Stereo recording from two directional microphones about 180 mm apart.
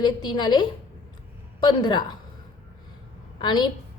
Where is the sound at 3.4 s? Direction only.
25° left (ahead or behind).